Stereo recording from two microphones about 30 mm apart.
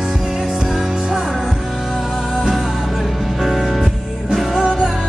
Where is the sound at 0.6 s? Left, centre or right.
Centre.